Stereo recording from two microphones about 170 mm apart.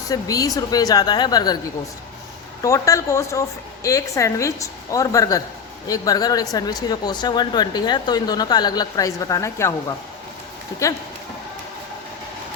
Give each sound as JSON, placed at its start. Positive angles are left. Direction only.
{"t": 0.1, "sound": "speech", "side_deg": 20}